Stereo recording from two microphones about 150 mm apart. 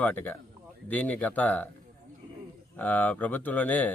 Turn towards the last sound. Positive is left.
turn(degrees=10)  # may be behind; listen again after turning